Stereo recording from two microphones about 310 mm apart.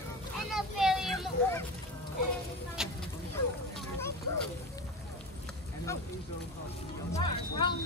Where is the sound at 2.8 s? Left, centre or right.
Centre.